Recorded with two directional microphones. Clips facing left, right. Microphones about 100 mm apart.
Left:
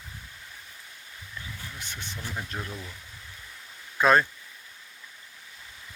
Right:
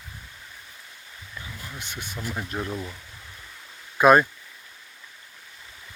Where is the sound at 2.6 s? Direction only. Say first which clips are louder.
Right 7 dB; 30° right (ahead or behind).